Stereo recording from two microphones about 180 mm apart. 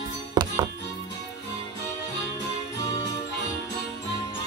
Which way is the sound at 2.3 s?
20° left (ahead or behind).